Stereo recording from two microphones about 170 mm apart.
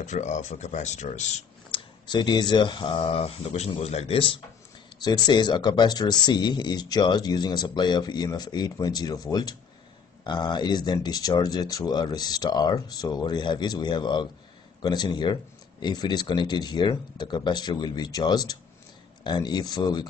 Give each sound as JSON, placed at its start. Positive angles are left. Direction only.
{"t": 0.0, "sound": "speech", "side_deg": 45}
{"t": 2.0, "sound": "speech", "side_deg": 25}